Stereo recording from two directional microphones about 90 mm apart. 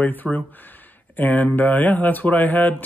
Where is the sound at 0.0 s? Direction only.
20° left (ahead or behind).